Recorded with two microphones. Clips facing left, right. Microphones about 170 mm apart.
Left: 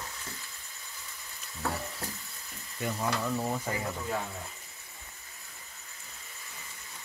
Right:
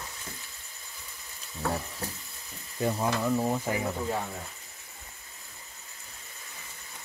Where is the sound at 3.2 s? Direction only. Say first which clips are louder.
Right 4 dB; 15° right (ahead or behind).